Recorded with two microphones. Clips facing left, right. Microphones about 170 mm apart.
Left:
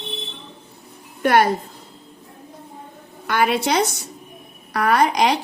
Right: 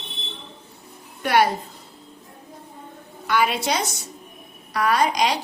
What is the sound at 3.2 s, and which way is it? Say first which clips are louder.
A woman's voice: left 2 dB; 55° left (ahead or behind).